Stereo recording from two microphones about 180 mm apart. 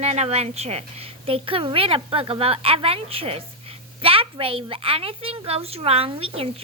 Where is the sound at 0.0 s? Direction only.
35° right (ahead or behind).